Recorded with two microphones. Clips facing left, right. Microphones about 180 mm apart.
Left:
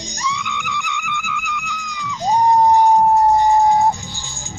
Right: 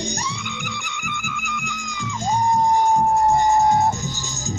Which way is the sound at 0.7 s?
65° left (ahead or behind).